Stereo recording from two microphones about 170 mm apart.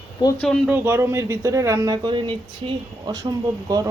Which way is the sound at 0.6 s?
10° right (ahead or behind).